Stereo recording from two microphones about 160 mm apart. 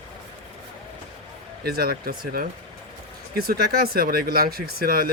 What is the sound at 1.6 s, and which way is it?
Speech, 70° right (ahead or behind).